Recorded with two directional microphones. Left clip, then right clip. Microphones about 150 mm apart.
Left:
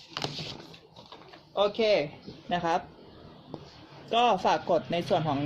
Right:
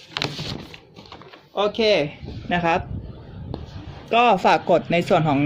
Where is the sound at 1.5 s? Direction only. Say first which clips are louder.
Right 5 dB; 55° right (ahead or behind).